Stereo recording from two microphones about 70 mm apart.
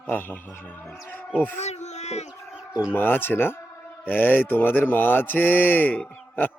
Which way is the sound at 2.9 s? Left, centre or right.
Left.